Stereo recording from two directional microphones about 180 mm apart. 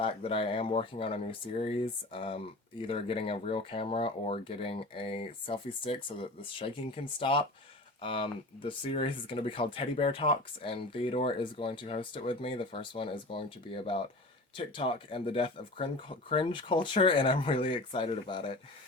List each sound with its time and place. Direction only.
0.0 s speech: 30° left (ahead or behind)